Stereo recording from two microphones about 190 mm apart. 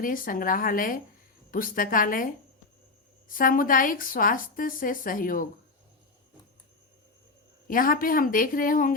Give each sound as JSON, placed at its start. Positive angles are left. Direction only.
{"t": 0.0, "sound": "a woman's voice", "side_deg": 45}
{"t": 7.7, "sound": "a woman's voice", "side_deg": 50}